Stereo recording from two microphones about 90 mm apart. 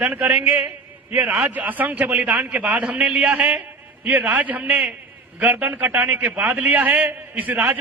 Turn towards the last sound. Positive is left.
turn(degrees=-20)  # may be behind; listen again after turning